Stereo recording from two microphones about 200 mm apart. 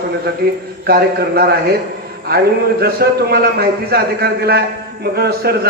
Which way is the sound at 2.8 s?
50° right (ahead or behind).